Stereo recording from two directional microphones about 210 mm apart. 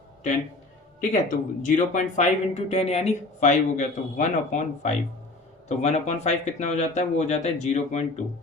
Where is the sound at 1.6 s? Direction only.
35° left (ahead or behind).